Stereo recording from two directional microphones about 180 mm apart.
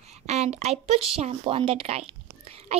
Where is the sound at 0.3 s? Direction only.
35° right (ahead or behind).